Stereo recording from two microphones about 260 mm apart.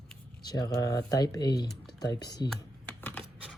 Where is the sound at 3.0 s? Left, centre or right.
Centre.